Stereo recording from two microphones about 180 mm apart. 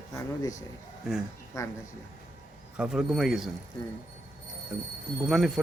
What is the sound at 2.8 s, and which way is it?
Speech, 5° right (ahead or behind).